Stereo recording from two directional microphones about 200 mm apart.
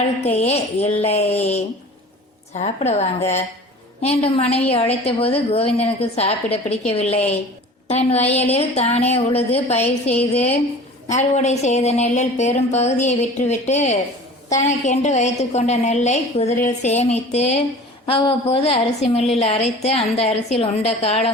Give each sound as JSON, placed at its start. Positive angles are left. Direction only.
{"t": 0.2, "sound": "a woman's voice", "side_deg": 30}